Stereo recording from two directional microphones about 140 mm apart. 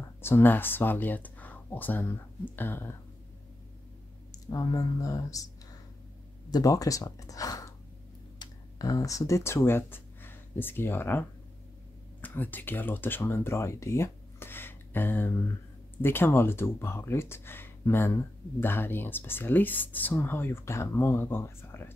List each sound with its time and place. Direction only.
0.2 s speech: 15° left (ahead or behind)
4.3 s speech: 25° left (ahead or behind)
6.5 s speech: 25° left (ahead or behind)